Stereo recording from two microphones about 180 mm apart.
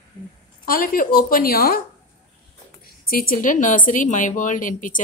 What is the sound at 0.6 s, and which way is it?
Speech, 50° left (ahead or behind).